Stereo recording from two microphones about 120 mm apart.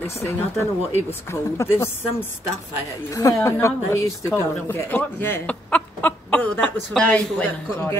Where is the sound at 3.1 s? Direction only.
25° left (ahead or behind); by 7.2 s 10° left (ahead or behind).